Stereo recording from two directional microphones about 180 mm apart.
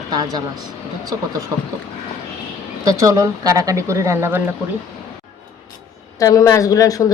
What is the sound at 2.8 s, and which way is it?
Speech, 15° right (ahead or behind).